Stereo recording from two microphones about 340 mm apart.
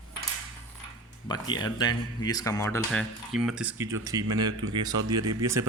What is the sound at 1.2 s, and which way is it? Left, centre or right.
A man's voice, centre.